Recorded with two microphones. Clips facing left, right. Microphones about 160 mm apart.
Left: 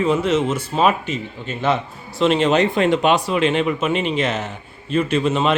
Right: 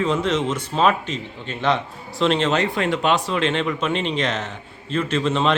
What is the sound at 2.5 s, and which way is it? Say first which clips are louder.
Speech: left 5 dB; 20° left (ahead or behind).